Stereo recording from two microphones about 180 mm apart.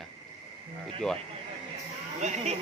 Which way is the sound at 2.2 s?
40° right (ahead or behind).